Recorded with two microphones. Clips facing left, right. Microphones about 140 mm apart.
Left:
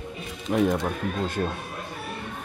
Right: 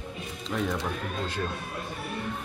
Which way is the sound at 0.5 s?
50° left (ahead or behind).